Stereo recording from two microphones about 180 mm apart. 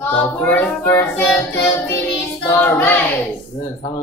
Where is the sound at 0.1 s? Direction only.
10° left (ahead or behind).